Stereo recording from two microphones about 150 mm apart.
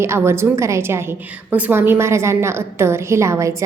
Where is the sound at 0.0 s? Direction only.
15° right (ahead or behind).